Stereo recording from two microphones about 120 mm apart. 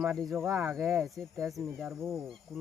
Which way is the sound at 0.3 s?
25° right (ahead or behind).